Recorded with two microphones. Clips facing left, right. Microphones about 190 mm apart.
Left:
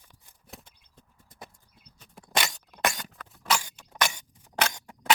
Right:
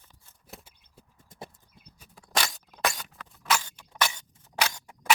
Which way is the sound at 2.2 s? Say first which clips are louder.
Left 1 dB; 20° left (ahead or behind).